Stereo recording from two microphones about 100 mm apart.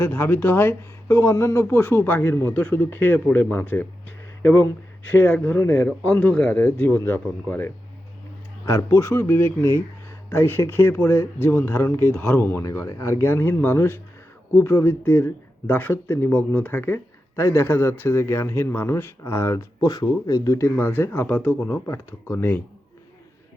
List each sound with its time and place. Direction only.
0.0 s speech: 20° left (ahead or behind)
12.6 s speech: 35° left (ahead or behind)